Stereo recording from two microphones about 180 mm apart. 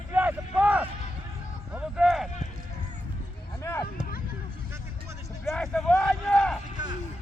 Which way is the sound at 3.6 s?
15° left (ahead or behind).